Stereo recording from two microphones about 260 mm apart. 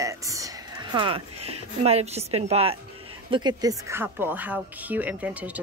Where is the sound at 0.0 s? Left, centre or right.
Centre.